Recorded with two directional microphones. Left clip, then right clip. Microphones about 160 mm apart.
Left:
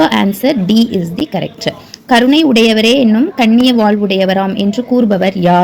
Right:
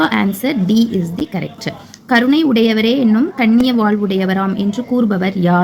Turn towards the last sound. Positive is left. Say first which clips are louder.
# left 6 dB
turn(degrees=20)  # may be behind; listen again after turning